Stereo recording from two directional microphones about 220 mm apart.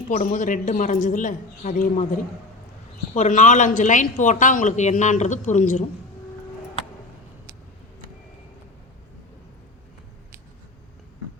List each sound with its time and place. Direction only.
0.1 s speech: 35° left (ahead or behind)
3.2 s speech: 35° left (ahead or behind)